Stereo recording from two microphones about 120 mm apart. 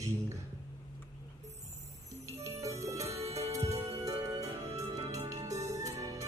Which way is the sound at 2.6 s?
25° right (ahead or behind).